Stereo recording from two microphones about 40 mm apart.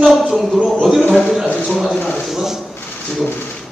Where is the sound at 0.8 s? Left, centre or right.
Centre.